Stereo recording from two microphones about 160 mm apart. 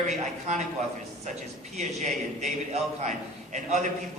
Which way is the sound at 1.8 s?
50° right (ahead or behind).